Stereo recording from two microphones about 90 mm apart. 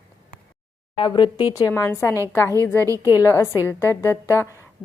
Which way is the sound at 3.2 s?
30° left (ahead or behind).